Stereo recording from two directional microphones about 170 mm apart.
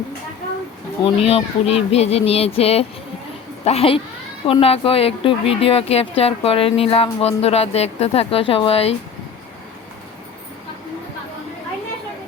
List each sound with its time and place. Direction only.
1.0 s a woman's voice: 35° left (ahead or behind)